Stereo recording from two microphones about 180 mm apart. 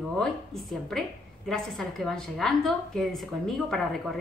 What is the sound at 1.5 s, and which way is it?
A woman's voice, centre (ahead or behind).